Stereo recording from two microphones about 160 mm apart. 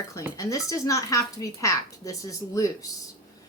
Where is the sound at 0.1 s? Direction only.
20° left (ahead or behind).